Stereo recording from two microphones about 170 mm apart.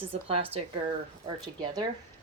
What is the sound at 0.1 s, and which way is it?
Speech, 35° right (ahead or behind).